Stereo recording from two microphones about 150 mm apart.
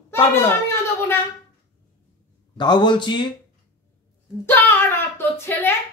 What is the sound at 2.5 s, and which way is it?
Speech, 30° left (ahead or behind).